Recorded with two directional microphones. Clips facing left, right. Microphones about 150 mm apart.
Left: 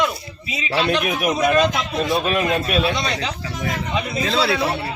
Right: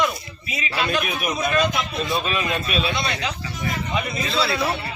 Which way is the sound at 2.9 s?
35° left (ahead or behind).